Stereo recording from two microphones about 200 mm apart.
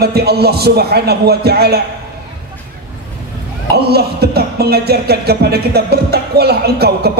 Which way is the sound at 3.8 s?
55° right (ahead or behind).